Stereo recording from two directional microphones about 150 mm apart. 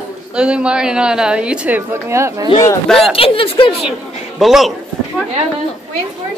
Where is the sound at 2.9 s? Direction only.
Centre (ahead or behind).